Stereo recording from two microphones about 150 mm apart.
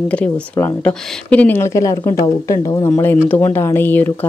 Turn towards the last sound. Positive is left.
turn(degrees=15)  # may be behind; listen again after turning